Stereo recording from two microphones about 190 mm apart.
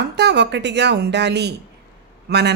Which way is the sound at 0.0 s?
60° right (ahead or behind).